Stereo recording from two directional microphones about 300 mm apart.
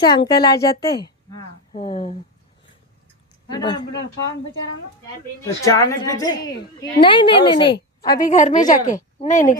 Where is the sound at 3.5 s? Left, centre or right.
Centre.